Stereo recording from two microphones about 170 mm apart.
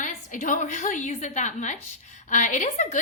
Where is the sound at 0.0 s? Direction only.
50° left (ahead or behind).